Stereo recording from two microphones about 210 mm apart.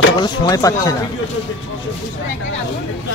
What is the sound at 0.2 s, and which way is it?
Speech, 20° left (ahead or behind).